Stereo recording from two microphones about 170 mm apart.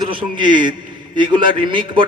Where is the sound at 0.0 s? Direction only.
30° right (ahead or behind).